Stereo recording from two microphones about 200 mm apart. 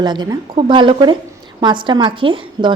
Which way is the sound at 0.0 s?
20° right (ahead or behind).